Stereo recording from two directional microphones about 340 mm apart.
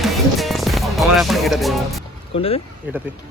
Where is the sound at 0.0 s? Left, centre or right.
Centre.